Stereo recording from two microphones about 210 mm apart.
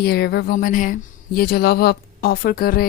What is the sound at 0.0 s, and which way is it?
Speech, 50° left (ahead or behind).